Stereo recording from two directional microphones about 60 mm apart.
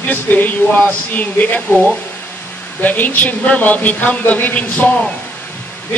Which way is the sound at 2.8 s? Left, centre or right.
Left.